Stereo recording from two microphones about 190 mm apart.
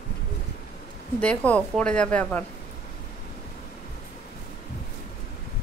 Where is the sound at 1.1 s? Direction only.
5° left (ahead or behind).